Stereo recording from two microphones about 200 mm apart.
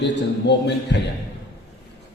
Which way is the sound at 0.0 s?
60° left (ahead or behind).